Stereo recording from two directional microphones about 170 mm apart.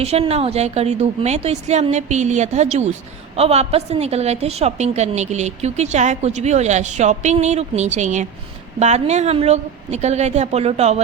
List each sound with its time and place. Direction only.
0.0 s a woman's voice: 35° right (ahead or behind)